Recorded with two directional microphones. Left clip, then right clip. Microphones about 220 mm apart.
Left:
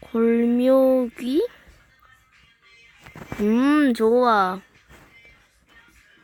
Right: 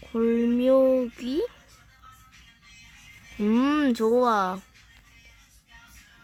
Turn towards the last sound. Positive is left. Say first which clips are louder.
# left 4 dB
turn(degrees=15)  # may be behind; listen again after turning